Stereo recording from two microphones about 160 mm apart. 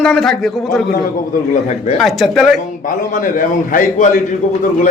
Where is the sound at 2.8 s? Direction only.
55° left (ahead or behind).